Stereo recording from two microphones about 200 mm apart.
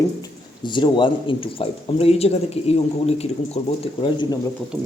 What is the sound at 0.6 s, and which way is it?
A man's voice, 25° left (ahead or behind).